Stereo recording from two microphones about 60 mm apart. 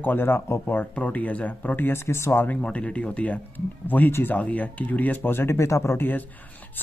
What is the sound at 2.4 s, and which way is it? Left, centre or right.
Speech, left.